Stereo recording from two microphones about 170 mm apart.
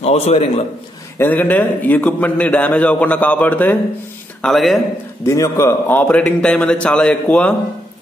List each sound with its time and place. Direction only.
0.0 s a man's voice: 35° left (ahead or behind)
1.1 s a man's voice: 10° left (ahead or behind)
5.2 s a man's voice: 20° left (ahead or behind)